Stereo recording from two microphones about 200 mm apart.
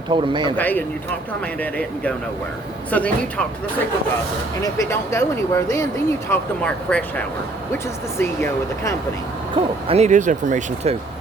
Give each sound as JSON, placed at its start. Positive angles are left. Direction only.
{"t": 0.1, "sound": "a man's voice", "side_deg": -25}
{"t": 0.5, "sound": "speech", "side_deg": 10}
{"t": 2.9, "sound": "speech", "side_deg": 5}
{"t": 4.6, "sound": "speech", "side_deg": 15}
{"t": 9.6, "sound": "speech", "side_deg": -30}